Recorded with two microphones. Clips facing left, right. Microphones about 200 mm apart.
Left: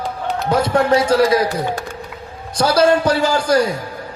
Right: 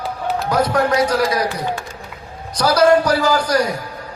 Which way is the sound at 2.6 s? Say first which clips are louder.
Right 1 dB; 25° left (ahead or behind).